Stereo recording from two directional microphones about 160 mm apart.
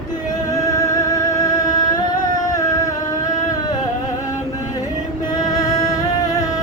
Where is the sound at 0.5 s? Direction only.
20° left (ahead or behind).